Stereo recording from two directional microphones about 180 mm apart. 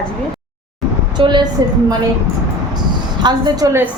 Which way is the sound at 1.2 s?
25° right (ahead or behind).